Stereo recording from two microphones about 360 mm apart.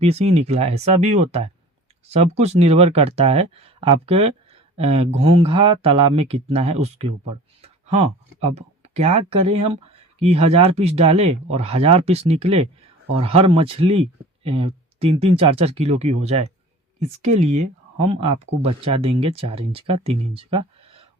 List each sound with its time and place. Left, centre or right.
0.0 s speech: centre